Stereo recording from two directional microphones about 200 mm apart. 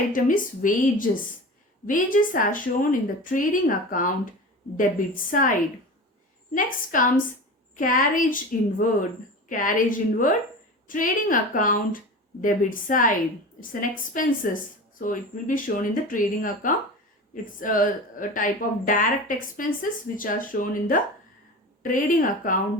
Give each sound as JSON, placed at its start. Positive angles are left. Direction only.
{"t": 0.1, "sound": "a woman's voice", "side_deg": 40}